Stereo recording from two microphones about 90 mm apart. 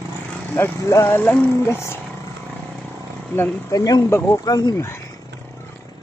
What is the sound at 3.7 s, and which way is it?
Speech, 45° left (ahead or behind).